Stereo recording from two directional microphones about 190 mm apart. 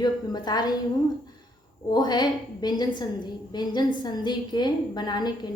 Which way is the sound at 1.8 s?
20° left (ahead or behind).